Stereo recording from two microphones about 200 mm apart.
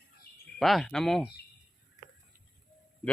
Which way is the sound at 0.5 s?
Centre (ahead or behind).